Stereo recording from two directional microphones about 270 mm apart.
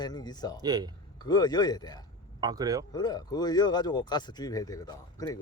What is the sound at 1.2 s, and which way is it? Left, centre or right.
Speech, centre.